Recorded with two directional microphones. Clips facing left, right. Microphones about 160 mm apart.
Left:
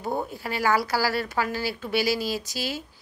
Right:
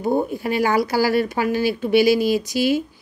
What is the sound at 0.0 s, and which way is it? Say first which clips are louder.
A woman's voice: right 9 dB; 15° right (ahead or behind).